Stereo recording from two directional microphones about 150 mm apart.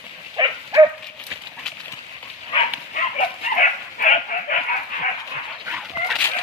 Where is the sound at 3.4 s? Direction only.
50° left (ahead or behind).